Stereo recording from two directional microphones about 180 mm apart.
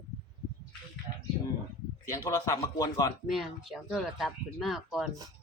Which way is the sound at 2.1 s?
20° left (ahead or behind).